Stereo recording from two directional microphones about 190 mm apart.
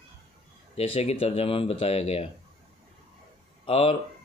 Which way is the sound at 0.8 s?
35° left (ahead or behind).